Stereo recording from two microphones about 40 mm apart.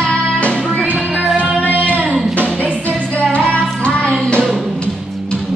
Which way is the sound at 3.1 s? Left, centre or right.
Left.